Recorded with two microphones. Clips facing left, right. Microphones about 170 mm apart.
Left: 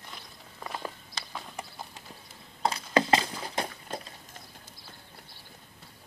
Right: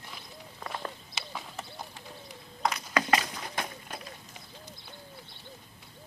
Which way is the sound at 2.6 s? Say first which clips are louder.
Left 3 dB; 30° left (ahead or behind).